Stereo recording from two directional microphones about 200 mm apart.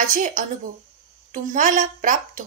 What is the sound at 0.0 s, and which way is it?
Speech, 40° right (ahead or behind).